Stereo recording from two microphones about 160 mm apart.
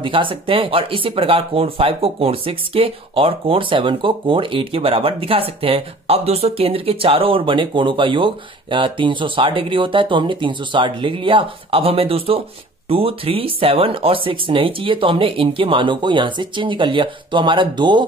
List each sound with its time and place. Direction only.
0.0 s speech: 30° right (ahead or behind)